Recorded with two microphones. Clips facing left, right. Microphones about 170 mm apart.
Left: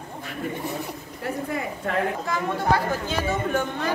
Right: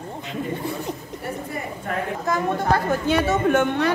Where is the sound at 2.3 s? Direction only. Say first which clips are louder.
Right 6 dB; 60° right (ahead or behind); by 3.9 s 75° right (ahead or behind).